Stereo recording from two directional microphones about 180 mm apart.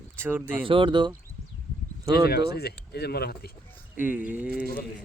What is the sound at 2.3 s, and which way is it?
Speech, 60° left (ahead or behind).